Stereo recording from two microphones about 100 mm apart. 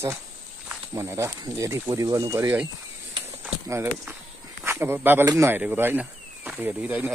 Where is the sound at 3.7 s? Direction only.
20° right (ahead or behind).